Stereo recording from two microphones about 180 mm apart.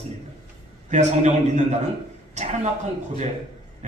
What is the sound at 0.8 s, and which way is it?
A man's voice, 40° right (ahead or behind).